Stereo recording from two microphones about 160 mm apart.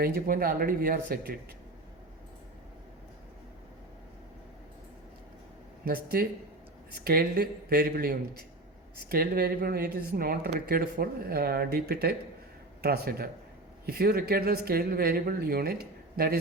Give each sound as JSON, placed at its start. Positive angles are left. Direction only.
{"t": 0.0, "sound": "speech", "side_deg": -65}
{"t": 5.8, "sound": "speech", "side_deg": -70}